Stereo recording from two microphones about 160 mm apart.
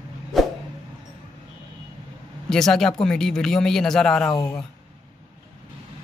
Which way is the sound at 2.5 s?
5° left (ahead or behind).